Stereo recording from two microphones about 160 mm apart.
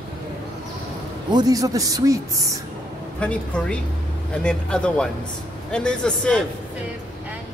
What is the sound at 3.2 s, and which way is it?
Speech, 5° left (ahead or behind).